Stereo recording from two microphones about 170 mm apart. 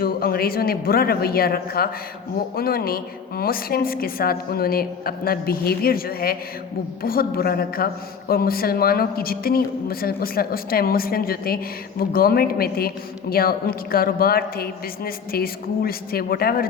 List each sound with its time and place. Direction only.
0.0 s a man's voice: 65° left (ahead or behind)